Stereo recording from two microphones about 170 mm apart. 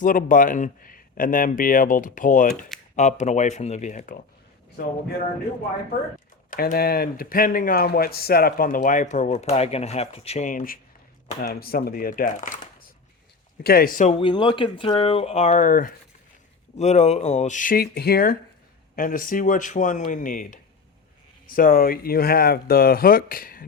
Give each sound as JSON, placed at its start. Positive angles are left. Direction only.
{"t": 0.0, "sound": "speech", "side_deg": 50}
{"t": 6.5, "sound": "speech", "side_deg": 55}
{"t": 11.6, "sound": "speech", "side_deg": 65}
{"t": 13.6, "sound": "speech", "side_deg": 65}
{"t": 14.1, "sound": "speech", "side_deg": 30}
{"t": 16.7, "sound": "speech", "side_deg": 40}